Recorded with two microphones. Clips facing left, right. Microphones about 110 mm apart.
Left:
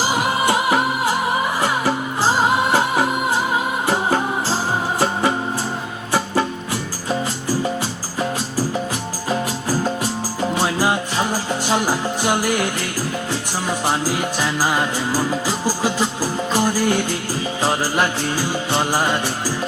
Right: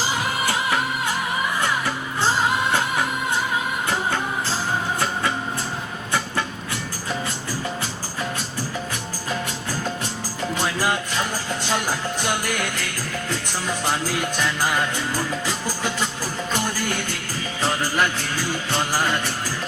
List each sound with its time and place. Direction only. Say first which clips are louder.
0.4 s music: left 6 dB; 30° left (ahead or behind)
9.3 s music: left 7 dB; 35° left (ahead or behind)